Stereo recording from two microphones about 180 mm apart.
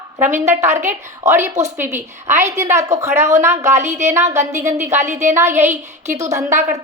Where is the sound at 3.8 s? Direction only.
40° right (ahead or behind).